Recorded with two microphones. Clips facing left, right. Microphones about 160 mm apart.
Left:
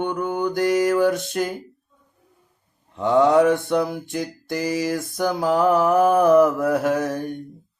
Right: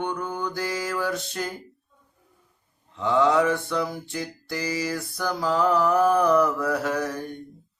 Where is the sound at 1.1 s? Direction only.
50° left (ahead or behind).